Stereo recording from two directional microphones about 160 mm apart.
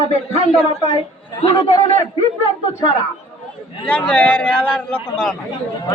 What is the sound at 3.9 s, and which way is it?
A man's voice, 10° left (ahead or behind).